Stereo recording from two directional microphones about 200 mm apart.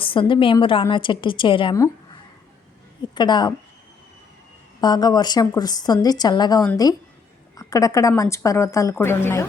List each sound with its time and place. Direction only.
0.0 s a woman's voice: 25° left (ahead or behind)
4.8 s a woman's voice: 20° left (ahead or behind)